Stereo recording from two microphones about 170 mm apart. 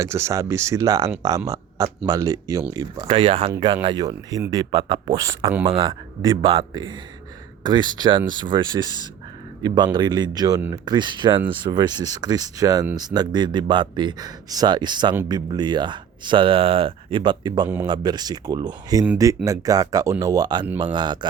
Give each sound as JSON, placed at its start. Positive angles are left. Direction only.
{"t": 0.0, "sound": "speech", "side_deg": -15}
{"t": 3.1, "sound": "speech", "side_deg": -30}